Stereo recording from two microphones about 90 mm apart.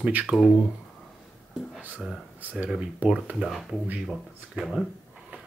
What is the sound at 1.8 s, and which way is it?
Speech, 20° right (ahead or behind).